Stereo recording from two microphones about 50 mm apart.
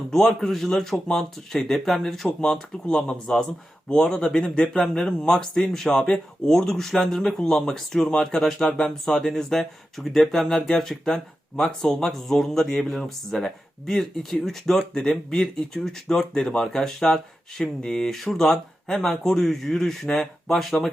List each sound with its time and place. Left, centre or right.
0.1 s a man's voice: centre
2.4 s speech: centre